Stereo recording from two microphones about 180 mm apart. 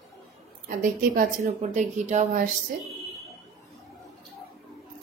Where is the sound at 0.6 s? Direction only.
50° right (ahead or behind).